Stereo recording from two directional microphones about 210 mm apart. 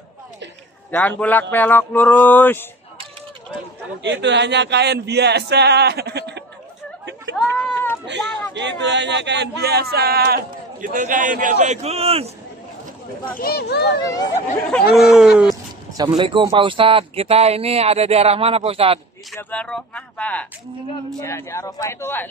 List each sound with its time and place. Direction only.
0.9 s speech: 5° left (ahead or behind)
4.0 s speech: 55° right (ahead or behind)
7.5 s a sound: 10° left (ahead or behind)
8.1 s speech: 55° right (ahead or behind); by 12.3 s 30° right (ahead or behind)
13.4 s speech: 50° left (ahead or behind)
14.7 s speech: centre (ahead or behind)
16.0 s speech: 20° right (ahead or behind)
19.5 s speech: 5° left (ahead or behind)